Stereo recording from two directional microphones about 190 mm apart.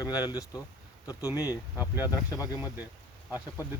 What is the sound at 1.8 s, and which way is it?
Speech, 10° right (ahead or behind).